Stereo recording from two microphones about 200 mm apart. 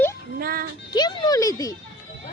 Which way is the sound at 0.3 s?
50° right (ahead or behind).